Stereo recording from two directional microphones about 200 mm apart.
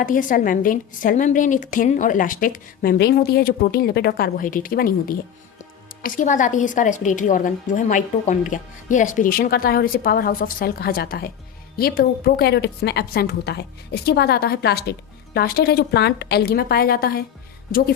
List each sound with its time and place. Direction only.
0.0 s a woman's voice: 40° left (ahead or behind)